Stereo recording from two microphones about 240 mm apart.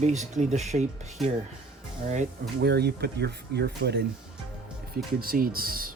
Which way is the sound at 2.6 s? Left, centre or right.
Right.